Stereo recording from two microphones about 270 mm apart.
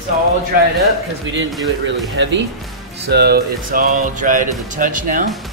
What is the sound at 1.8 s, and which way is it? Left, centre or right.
Speech, right.